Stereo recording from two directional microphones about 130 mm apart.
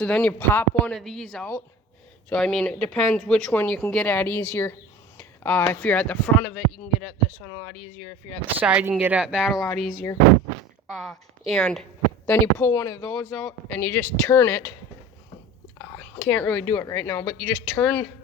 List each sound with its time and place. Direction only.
0.0 s speech: 10° left (ahead or behind)
7.4 s speech: 25° left (ahead or behind)
8.5 s a woman's voice: 10° right (ahead or behind)
12.2 s speech: 15° left (ahead or behind)
13.1 s speech: 5° left (ahead or behind)
15.8 s speech: 15° left (ahead or behind)